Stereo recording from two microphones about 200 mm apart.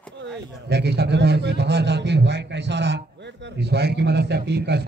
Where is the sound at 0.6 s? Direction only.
55° right (ahead or behind).